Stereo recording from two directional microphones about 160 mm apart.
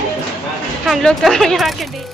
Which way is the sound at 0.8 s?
Centre (ahead or behind).